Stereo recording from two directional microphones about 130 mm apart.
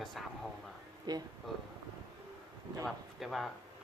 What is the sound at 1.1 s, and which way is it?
Speech, 30° right (ahead or behind).